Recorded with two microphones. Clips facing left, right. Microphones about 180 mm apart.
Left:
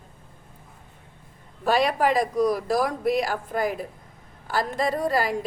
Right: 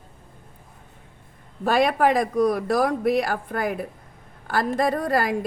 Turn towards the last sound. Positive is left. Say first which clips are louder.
# right 2 dB
turn(degrees=-55)  # may be behind; listen again after turning